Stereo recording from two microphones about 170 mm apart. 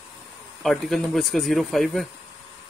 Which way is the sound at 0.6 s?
Centre (ahead or behind).